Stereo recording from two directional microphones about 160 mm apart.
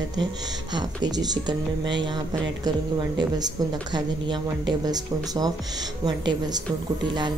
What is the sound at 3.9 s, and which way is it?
Speech, 25° right (ahead or behind).